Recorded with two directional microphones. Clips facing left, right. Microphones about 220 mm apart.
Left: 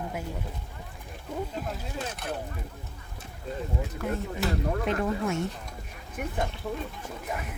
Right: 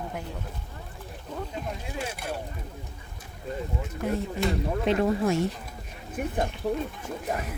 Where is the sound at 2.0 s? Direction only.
10° right (ahead or behind).